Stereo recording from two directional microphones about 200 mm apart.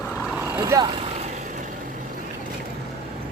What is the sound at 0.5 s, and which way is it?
Speech, 15° right (ahead or behind).